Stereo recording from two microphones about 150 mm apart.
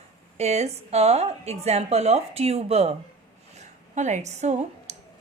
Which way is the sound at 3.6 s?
50° right (ahead or behind).